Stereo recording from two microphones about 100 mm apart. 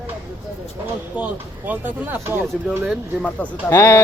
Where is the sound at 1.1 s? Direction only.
15° right (ahead or behind).